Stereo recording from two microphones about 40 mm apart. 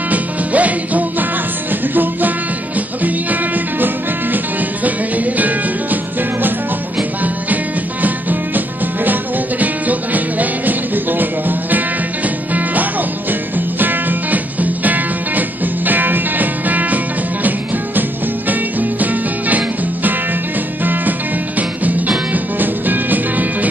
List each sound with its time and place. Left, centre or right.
0.1 s music: right
3.0 s music: right
8.0 s music: right
13.3 s music: right